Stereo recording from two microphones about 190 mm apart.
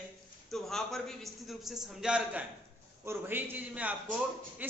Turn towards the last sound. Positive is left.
turn(degrees=-5)  # may be behind; listen again after turning